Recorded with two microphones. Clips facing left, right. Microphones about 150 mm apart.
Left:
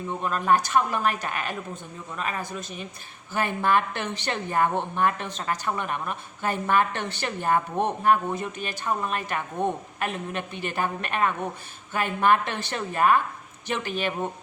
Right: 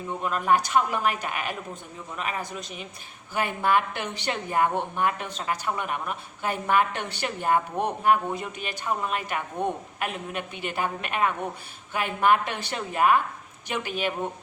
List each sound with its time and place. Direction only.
0.2 s a woman's voice: 10° right (ahead or behind)